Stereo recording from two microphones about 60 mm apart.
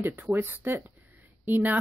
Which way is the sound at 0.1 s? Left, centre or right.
Right.